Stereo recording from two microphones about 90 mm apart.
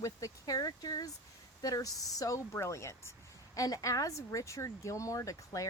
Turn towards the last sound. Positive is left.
turn(degrees=40)  # may be behind; listen again after turning